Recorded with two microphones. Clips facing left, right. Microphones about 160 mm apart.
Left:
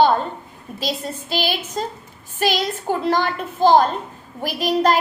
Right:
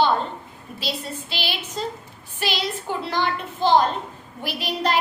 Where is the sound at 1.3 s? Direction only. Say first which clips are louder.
Left 8 dB; 45° left (ahead or behind).